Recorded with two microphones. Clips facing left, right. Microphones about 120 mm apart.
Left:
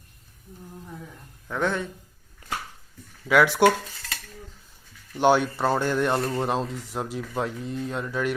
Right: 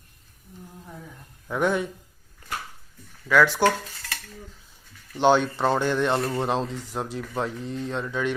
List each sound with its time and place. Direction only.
1.5 s speech: 10° right (ahead or behind)
3.2 s dishes: 15° left (ahead or behind)
5.1 s speech: 10° left (ahead or behind)